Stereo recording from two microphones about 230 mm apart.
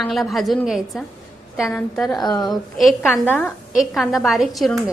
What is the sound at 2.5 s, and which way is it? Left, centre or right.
A woman's voice, centre.